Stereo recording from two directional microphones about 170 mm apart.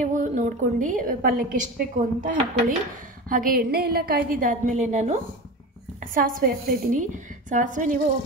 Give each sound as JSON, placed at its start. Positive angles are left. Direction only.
{"t": 0.0, "sound": "a woman's voice", "side_deg": -45}